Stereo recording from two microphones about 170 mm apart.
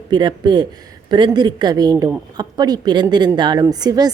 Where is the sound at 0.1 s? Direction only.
25° right (ahead or behind).